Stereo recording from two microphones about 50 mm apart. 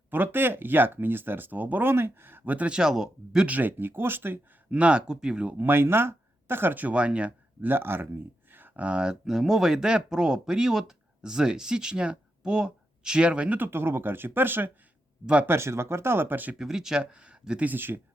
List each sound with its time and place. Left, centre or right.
0.1 s speech: right
2.6 s speech: centre
3.4 s speech: right
4.7 s speech: right
5.5 s speech: right
6.9 s speech: right
7.6 s speech: right
8.5 s a sound: right
8.8 s speech: centre
13.6 s speech: right
15.4 s speech: right
16.6 s speech: centre
17.7 s speech: right